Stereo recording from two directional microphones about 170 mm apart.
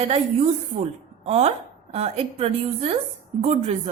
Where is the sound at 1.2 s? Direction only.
40° right (ahead or behind).